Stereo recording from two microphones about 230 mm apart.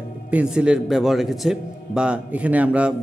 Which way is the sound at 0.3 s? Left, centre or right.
Centre.